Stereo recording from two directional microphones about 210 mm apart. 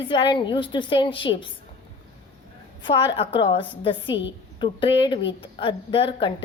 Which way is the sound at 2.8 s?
20° left (ahead or behind).